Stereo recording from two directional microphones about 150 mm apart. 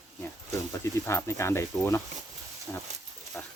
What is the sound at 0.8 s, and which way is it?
Speech, 20° left (ahead or behind).